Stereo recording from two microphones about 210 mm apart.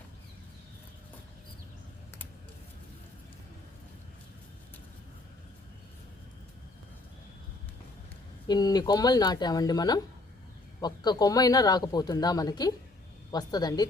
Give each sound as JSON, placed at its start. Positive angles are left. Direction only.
{"t": 8.4, "sound": "speech", "side_deg": 20}